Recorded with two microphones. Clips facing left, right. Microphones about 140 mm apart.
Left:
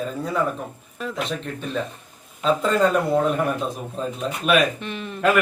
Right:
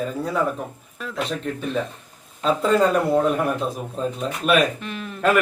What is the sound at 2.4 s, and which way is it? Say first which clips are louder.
Speech: right 1 dB; centre (ahead or behind).